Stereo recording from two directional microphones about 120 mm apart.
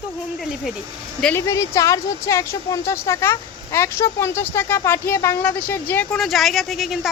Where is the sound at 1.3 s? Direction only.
25° left (ahead or behind).